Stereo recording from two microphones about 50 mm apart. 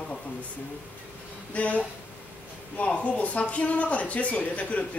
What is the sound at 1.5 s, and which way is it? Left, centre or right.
Speech, left.